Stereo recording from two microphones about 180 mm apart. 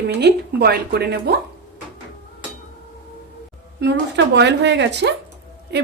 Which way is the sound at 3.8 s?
70° right (ahead or behind).